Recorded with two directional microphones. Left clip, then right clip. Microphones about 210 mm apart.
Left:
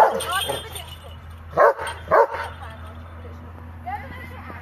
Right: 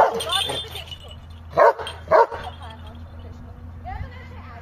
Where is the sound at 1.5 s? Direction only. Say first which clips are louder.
Right 1 dB; 35° right (ahead or behind).